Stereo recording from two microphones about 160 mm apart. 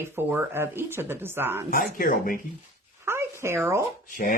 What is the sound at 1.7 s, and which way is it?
Speech, 60° left (ahead or behind).